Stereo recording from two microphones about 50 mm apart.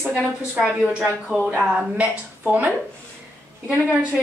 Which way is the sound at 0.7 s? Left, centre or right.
Right.